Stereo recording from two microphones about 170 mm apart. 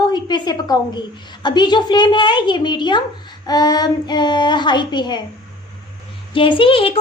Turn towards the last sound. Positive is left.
turn(degrees=30)  # may be behind; listen again after turning